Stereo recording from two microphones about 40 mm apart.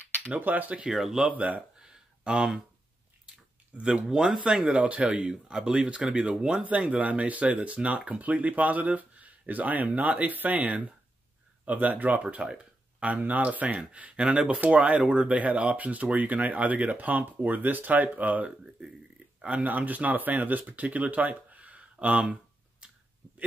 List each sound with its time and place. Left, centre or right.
0.4 s speech: right
0.8 s speech: centre
1.3 s speech: right
1.8 s a sound: centre
3.7 s speech: right
5.3 s speech: centre
7.0 s speech: right
22.8 s clicking: right